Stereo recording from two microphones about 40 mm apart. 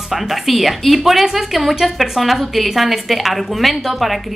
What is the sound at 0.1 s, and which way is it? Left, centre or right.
A woman's voice, centre.